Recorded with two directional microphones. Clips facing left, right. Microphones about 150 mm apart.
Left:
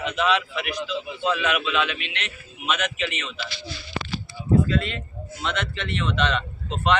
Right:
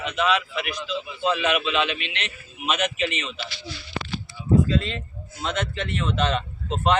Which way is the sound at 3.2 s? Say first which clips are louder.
Right 1 dB; 20° right (ahead or behind).